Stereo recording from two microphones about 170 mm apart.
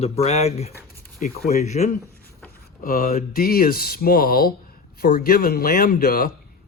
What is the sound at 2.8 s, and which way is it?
Speech, 60° left (ahead or behind).